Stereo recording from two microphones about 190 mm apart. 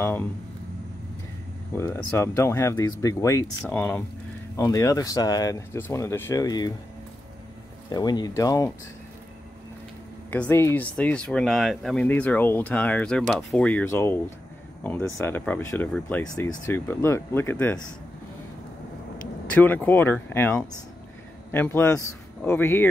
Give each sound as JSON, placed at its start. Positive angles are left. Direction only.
{"t": 0.0, "sound": "speech", "side_deg": 10}
{"t": 1.8, "sound": "speech", "side_deg": 15}
{"t": 7.9, "sound": "speech", "side_deg": 20}
{"t": 10.3, "sound": "speech", "side_deg": 10}
{"t": 19.4, "sound": "speech", "side_deg": 10}